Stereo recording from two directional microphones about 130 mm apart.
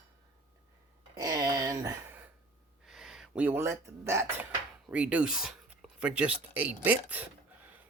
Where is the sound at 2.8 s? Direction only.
5° right (ahead or behind).